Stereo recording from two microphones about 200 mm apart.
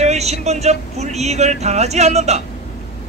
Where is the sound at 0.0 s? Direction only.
35° right (ahead or behind).